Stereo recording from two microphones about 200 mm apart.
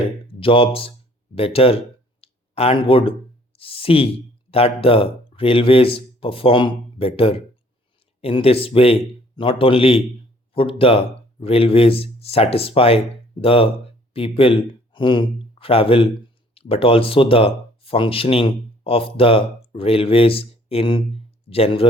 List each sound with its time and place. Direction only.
0.0 s speech: 25° left (ahead or behind)
2.2 s a sound: 30° left (ahead or behind)
4.5 s speech: 30° left (ahead or behind)